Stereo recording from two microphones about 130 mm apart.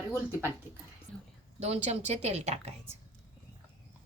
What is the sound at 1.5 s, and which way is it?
Speech, 55° right (ahead or behind).